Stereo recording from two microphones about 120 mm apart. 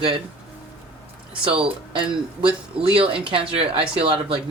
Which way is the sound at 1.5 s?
50° right (ahead or behind).